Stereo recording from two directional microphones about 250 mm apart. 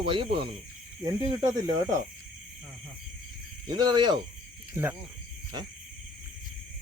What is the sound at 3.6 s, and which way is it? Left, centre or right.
Speech, centre.